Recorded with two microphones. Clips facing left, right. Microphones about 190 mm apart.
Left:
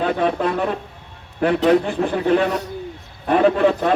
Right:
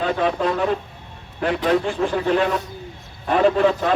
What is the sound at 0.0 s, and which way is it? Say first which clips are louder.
A man's voice: left 1 dB; 55° left (ahead or behind).